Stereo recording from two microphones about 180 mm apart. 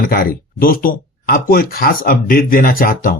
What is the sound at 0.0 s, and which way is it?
Speech, 55° left (ahead or behind).